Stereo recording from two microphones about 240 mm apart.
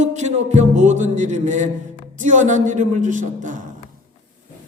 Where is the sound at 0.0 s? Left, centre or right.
Right.